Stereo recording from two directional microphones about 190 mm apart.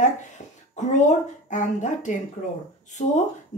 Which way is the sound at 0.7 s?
40° left (ahead or behind).